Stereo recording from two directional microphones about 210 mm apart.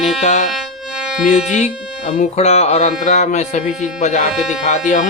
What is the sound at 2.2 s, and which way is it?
Speech, 30° left (ahead or behind).